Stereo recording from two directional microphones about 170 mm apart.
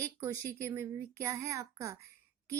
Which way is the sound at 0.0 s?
15° right (ahead or behind).